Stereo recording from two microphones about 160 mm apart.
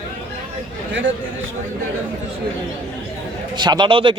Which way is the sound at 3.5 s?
30° right (ahead or behind).